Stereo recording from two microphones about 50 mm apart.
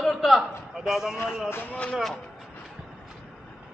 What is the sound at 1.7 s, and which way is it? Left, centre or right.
Speech, centre.